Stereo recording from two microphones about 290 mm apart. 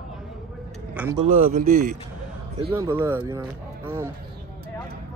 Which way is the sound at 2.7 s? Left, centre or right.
Centre.